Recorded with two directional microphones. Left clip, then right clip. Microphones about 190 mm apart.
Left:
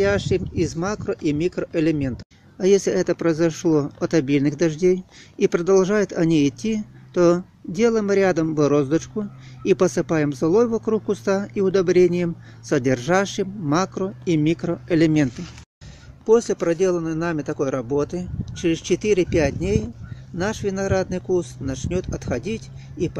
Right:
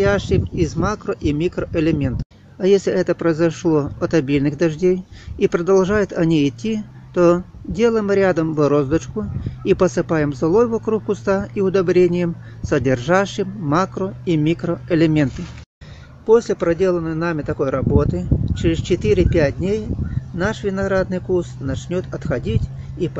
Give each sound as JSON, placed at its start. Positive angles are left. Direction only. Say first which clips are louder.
{"t": 0.0, "sound": "speech", "louder": "right 2 dB", "side_deg": 25}